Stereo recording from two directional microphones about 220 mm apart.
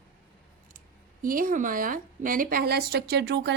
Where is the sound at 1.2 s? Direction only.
40° right (ahead or behind).